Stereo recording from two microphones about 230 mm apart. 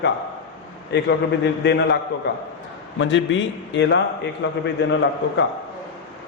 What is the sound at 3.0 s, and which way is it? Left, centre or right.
A man's voice, left.